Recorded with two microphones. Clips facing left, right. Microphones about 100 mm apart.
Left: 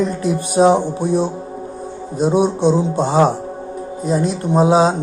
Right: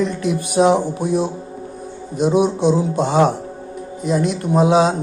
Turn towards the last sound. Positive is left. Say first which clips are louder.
# left 1 dB
turn(degrees=35)  # may be behind; listen again after turning